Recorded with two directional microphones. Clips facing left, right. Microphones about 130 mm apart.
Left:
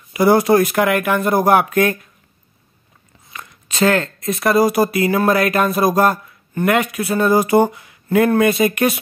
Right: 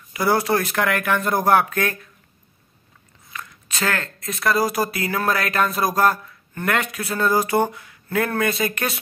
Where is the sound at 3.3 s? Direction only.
25° left (ahead or behind).